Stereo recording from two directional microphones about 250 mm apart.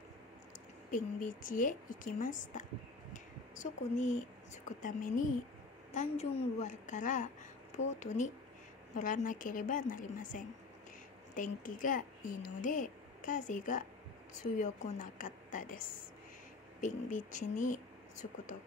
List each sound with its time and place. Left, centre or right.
0.9 s speech: left
3.1 s a sound: left
4.8 s a woman's voice: left